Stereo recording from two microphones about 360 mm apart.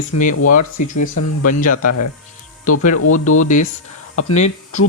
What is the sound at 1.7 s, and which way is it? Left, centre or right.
Speech, left.